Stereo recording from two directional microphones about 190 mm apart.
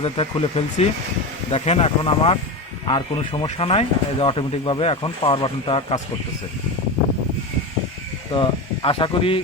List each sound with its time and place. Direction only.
0.0 s speech: 30° left (ahead or behind)
8.3 s speech: 25° left (ahead or behind)